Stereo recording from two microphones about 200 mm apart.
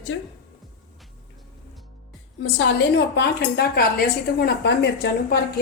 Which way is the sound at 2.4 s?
60° left (ahead or behind).